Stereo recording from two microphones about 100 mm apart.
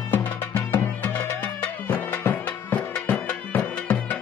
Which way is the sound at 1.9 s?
15° left (ahead or behind).